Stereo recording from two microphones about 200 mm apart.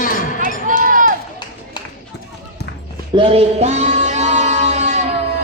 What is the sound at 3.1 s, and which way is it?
Music, 25° right (ahead or behind).